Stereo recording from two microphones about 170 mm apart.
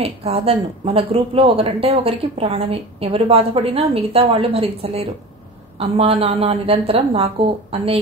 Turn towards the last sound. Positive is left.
turn(degrees=-35)  # may be behind; listen again after turning